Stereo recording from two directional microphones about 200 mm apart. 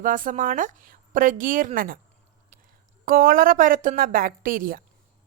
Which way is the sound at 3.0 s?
45° right (ahead or behind).